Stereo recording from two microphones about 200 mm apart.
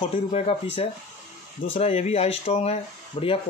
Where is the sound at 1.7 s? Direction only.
30° left (ahead or behind).